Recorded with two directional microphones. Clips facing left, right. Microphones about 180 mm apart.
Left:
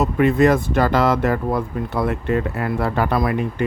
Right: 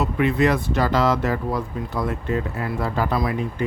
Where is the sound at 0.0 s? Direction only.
45° left (ahead or behind).